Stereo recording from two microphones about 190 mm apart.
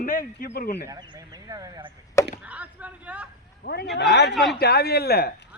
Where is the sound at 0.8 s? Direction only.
20° right (ahead or behind).